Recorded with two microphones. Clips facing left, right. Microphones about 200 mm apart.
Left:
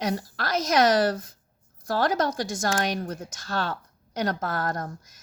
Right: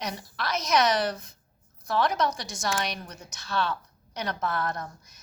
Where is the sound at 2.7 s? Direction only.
45° left (ahead or behind).